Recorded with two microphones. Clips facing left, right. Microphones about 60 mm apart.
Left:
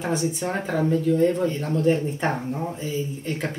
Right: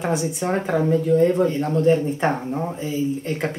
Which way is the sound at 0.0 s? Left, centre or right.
Centre.